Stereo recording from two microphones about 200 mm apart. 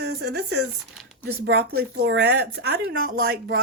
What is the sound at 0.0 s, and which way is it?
Speech, 55° right (ahead or behind).